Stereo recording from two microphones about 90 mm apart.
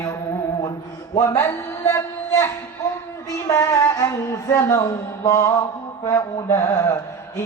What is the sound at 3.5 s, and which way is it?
A man's voice, 30° left (ahead or behind).